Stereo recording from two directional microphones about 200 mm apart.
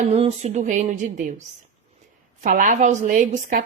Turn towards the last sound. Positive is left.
turn(degrees=-40)  # may be behind; listen again after turning